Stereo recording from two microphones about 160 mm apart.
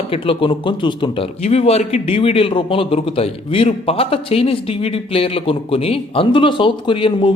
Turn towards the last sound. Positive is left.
turn(degrees=30)  # may be behind; listen again after turning